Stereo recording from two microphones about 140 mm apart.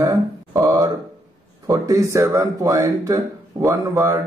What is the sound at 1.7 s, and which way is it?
Speech, 25° right (ahead or behind).